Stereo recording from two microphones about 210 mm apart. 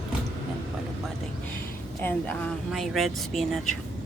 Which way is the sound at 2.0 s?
10° left (ahead or behind).